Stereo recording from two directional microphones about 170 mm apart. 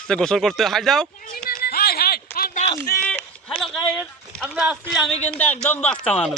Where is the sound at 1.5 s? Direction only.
65° left (ahead or behind).